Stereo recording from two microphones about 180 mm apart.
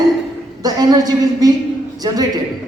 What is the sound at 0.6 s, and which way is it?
Speech, 20° right (ahead or behind).